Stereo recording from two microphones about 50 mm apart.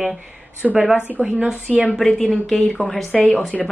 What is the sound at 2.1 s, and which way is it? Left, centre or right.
Speech, centre.